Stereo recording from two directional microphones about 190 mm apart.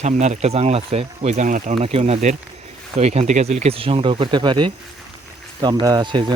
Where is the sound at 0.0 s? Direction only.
40° right (ahead or behind).